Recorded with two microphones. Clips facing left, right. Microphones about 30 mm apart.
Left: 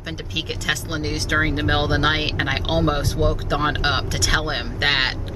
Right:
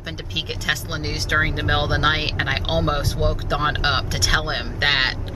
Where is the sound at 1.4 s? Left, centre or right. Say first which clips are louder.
Even; centre.